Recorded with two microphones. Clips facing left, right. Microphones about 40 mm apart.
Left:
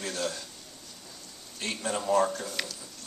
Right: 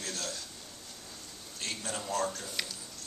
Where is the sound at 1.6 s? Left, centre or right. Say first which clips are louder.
Left 6 dB; left.